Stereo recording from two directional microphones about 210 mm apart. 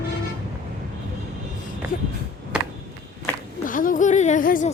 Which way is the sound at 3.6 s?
40° left (ahead or behind).